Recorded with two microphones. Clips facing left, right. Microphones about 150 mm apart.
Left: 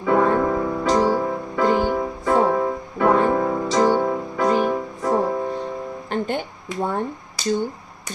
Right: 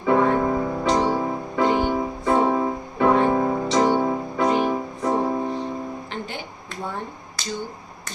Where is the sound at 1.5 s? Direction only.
20° right (ahead or behind).